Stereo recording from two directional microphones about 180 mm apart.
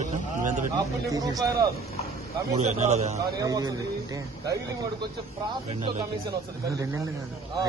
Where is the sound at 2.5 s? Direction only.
40° right (ahead or behind).